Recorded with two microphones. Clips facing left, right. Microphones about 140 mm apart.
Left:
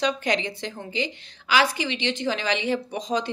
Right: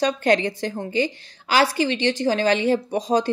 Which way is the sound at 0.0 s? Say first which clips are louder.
Right 5 dB; 50° right (ahead or behind).